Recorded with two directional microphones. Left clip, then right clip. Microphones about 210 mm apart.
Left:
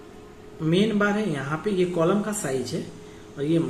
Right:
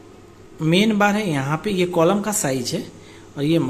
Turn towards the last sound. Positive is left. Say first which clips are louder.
# right 4 dB
turn(degrees=-55)  # may be behind; listen again after turning